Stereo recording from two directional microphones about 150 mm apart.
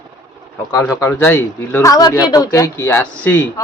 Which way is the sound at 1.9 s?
25° left (ahead or behind).